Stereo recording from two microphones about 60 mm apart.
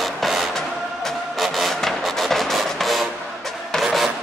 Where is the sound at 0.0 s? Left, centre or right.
Centre.